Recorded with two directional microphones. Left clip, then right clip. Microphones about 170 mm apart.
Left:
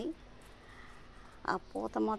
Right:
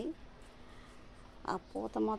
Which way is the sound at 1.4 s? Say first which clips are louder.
Left 3 dB; centre (ahead or behind).